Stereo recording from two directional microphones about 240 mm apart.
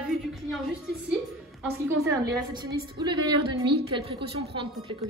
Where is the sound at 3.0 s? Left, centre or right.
Centre.